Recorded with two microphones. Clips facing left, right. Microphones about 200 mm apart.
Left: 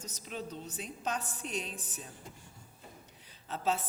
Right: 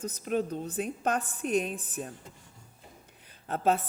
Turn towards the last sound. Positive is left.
turn(degrees=-55)  # may be behind; listen again after turning